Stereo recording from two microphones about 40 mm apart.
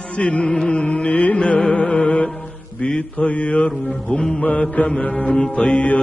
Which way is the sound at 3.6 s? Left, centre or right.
Left.